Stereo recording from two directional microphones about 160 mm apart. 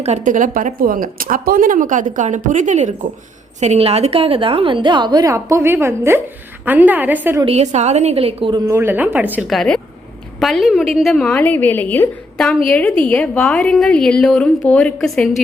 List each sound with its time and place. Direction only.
0.0 s a woman's voice: 50° right (ahead or behind); by 7.4 s 10° right (ahead or behind)
7.4 s a woman's voice: 45° right (ahead or behind); by 9.4 s 10° right (ahead or behind)
9.5 s a woman's voice: 5° left (ahead or behind)